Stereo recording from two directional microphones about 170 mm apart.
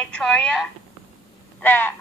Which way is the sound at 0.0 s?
5° left (ahead or behind).